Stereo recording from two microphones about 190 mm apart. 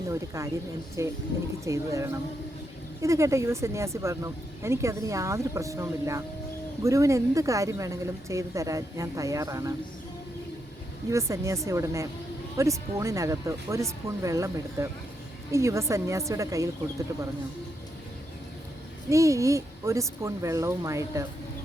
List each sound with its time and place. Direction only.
0.1 s speech: 15° right (ahead or behind)
11.1 s speech: 15° right (ahead or behind)
19.1 s speech: 15° right (ahead or behind)